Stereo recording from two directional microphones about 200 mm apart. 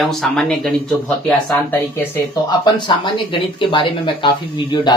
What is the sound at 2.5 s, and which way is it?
Speech, 20° left (ahead or behind).